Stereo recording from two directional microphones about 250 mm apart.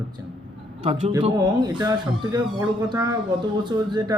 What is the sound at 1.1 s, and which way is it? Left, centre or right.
Speech, centre.